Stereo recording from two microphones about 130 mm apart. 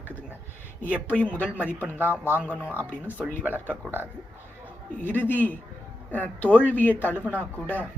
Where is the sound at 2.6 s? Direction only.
15° right (ahead or behind).